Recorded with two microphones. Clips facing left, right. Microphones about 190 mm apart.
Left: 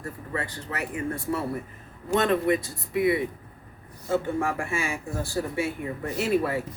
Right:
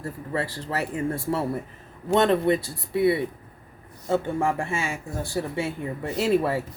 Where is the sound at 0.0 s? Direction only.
30° right (ahead or behind).